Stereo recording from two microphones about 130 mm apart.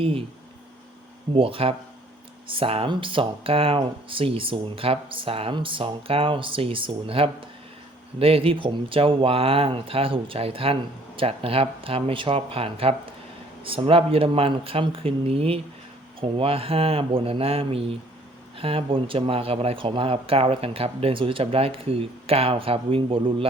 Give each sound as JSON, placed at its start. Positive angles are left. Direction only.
{"t": 0.0, "sound": "speech", "side_deg": -45}
{"t": 1.3, "sound": "speech", "side_deg": -45}